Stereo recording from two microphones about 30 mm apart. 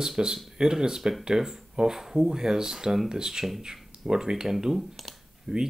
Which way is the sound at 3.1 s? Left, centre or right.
Right.